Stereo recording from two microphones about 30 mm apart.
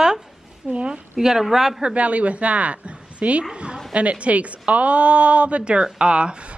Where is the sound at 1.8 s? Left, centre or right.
Right.